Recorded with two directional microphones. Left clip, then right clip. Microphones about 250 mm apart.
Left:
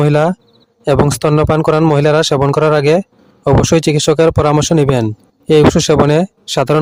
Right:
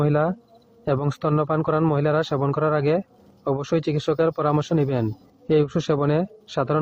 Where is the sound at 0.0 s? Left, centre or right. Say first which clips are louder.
Left 9 dB; left.